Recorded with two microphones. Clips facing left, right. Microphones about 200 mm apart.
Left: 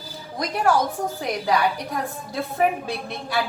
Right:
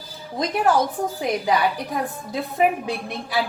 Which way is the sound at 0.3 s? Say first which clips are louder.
Right 1 dB; 20° right (ahead or behind).